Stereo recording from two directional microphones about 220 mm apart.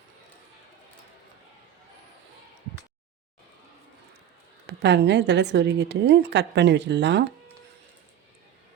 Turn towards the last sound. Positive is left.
turn(degrees=-50)  # may be behind; listen again after turning